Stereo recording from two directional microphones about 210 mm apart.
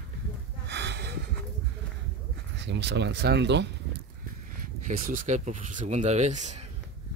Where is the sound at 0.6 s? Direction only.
55° right (ahead or behind).